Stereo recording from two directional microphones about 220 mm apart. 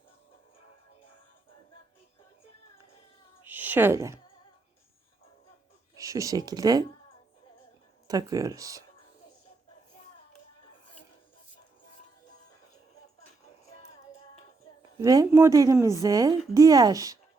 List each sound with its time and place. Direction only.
3.4 s a sound: 10° right (ahead or behind)
6.0 s speech: 15° right (ahead or behind)
8.0 s a woman's voice: 15° right (ahead or behind)
14.8 s a woman's voice: 15° right (ahead or behind)